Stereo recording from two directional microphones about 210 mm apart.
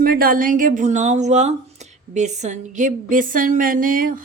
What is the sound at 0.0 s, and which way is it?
Speech, 45° right (ahead or behind).